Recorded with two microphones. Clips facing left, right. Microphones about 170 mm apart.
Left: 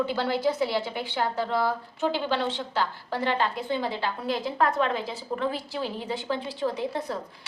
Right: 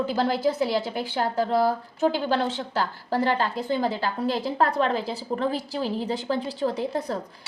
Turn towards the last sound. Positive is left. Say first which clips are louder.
# right 3 dB
turn(degrees=-40)  # may be behind; listen again after turning